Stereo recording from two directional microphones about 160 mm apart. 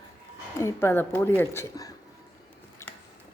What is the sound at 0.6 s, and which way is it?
Speech, 15° left (ahead or behind).